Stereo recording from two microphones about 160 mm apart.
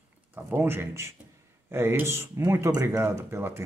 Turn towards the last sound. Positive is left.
turn(degrees=-15)  # may be behind; listen again after turning